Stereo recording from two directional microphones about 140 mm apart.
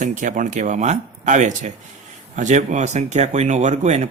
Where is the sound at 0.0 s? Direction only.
65° right (ahead or behind).